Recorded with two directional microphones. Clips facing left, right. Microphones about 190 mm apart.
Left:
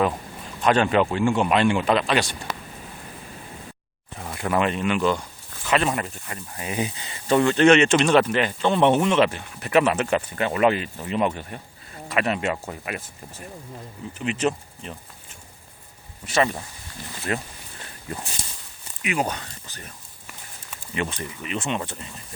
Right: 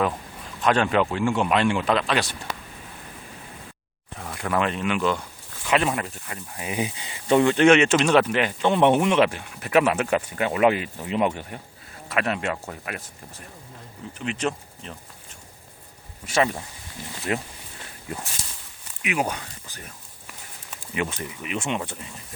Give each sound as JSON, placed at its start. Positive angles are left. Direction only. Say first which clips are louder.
{"t": 0.6, "sound": "speech", "louder": "left 2 dB", "side_deg": 0}
{"t": 4.2, "sound": "speech", "louder": "left 2 dB", "side_deg": 5}
{"t": 12.0, "sound": "speech", "louder": "left 2 dB", "side_deg": 0}
{"t": 14.2, "sound": "speech", "louder": "left 3 dB", "side_deg": 5}
{"t": 16.2, "sound": "speech", "louder": "even", "side_deg": -10}
{"t": 19.0, "sound": "speech", "louder": "even", "side_deg": -5}
{"t": 20.9, "sound": "speech", "louder": "even", "side_deg": -10}